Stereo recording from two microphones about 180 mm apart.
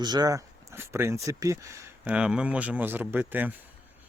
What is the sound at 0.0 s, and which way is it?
Speech, 20° right (ahead or behind).